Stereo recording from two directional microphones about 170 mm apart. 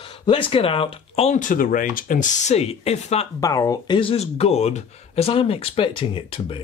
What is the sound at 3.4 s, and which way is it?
Speech, 20° left (ahead or behind).